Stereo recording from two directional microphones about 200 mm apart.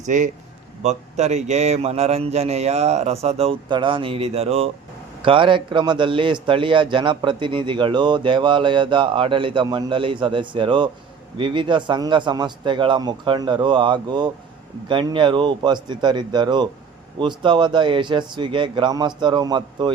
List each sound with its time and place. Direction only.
0.0 s a man's voice: 40° right (ahead or behind); by 19.9 s 20° right (ahead or behind)